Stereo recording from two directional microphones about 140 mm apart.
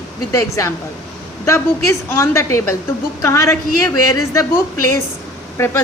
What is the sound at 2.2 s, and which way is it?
A woman's voice, 20° left (ahead or behind).